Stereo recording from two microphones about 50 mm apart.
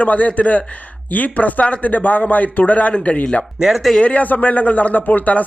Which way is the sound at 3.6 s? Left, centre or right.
Centre.